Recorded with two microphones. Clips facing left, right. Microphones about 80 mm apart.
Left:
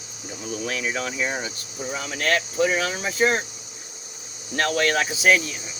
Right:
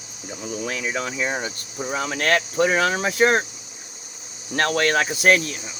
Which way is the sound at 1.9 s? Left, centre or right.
Right.